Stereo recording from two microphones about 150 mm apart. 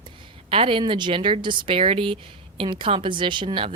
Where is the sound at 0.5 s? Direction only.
35° right (ahead or behind).